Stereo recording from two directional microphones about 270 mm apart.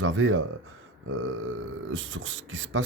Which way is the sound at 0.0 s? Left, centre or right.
Right.